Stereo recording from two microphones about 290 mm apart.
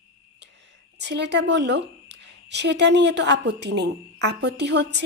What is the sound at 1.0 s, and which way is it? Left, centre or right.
A woman's voice, right.